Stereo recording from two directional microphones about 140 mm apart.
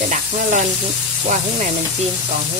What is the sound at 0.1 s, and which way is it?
Sizzle, 60° right (ahead or behind).